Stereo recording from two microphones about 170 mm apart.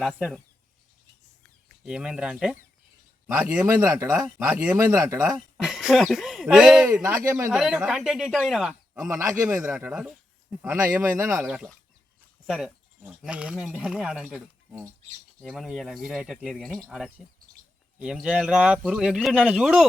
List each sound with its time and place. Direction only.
0.0 s speech: centre (ahead or behind)
1.8 s speech: 5° right (ahead or behind)
4.8 s speech: 20° right (ahead or behind)
5.3 s speech: centre (ahead or behind)
6.8 s speech: 15° right (ahead or behind)
7.5 s speech: 5° right (ahead or behind)
9.0 s speech: 15° right (ahead or behind)
10.7 s speech: 15° right (ahead or behind)